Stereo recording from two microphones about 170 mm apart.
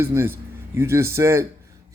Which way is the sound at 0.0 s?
15° right (ahead or behind).